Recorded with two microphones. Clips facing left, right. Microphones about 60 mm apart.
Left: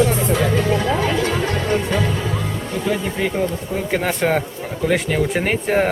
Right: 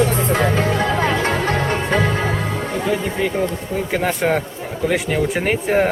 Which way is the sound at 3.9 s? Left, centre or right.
Centre.